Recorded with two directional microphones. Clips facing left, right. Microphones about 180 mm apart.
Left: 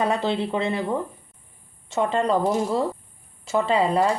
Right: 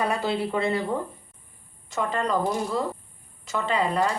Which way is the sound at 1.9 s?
25° left (ahead or behind).